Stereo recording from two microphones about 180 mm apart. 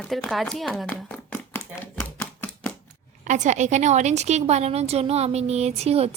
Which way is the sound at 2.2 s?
10° left (ahead or behind).